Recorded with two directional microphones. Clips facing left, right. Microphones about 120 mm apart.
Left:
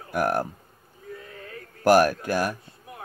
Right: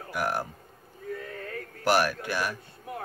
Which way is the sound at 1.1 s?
55° right (ahead or behind).